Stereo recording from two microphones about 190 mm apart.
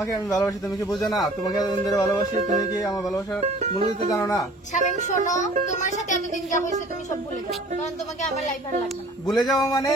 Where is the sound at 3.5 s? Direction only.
30° right (ahead or behind).